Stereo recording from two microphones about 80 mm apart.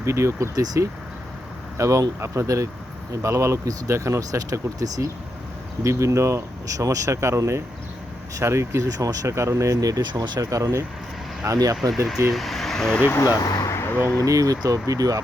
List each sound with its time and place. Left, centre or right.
0.0 s speech: right
10.1 s speech: right
10.4 s speech: right
12.3 s speech: centre
13.2 s speech: left
13.7 s a sound: left
14.3 s speech: right